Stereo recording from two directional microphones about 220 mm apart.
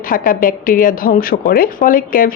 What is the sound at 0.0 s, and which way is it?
A woman's voice, 40° left (ahead or behind).